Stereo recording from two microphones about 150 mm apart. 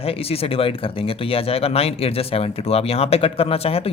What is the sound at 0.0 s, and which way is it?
A man's voice, 40° left (ahead or behind).